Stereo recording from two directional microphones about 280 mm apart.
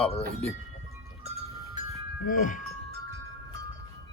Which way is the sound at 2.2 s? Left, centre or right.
Left.